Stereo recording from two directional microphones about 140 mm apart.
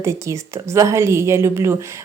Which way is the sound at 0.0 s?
20° right (ahead or behind).